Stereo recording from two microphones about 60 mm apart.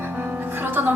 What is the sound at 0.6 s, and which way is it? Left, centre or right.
Music, right.